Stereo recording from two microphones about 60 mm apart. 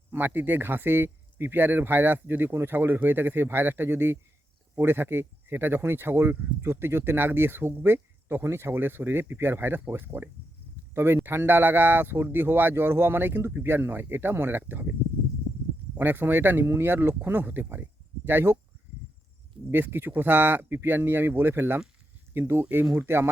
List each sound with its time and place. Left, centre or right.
0.1 s speech: right
16.0 s speech: right
19.7 s speech: right